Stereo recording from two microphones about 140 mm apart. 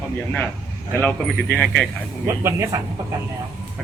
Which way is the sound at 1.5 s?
5° left (ahead or behind).